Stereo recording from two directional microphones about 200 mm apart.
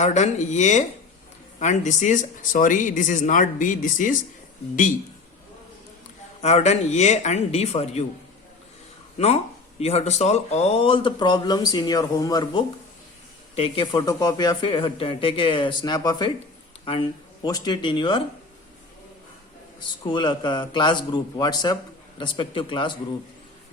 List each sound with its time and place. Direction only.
0.0 s speech: 35° left (ahead or behind)
6.4 s speech: 35° left (ahead or behind)
9.1 s speech: 30° left (ahead or behind)
20.1 s speech: 20° left (ahead or behind)